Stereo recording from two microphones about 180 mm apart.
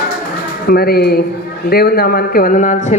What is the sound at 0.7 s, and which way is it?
Speech, 60° left (ahead or behind).